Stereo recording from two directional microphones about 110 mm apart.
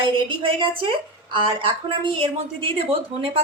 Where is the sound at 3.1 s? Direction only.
65° right (ahead or behind).